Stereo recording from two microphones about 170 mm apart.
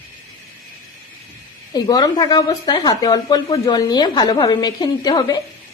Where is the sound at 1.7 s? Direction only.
25° left (ahead or behind).